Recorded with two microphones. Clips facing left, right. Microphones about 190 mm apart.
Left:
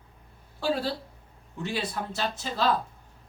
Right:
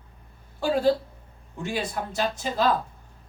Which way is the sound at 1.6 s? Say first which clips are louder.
Right 2 dB; 45° right (ahead or behind).